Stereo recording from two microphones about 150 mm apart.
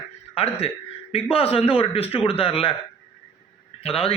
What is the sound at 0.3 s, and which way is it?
A man's voice, 40° left (ahead or behind).